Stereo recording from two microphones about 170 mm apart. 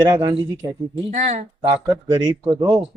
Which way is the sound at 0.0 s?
25° right (ahead or behind).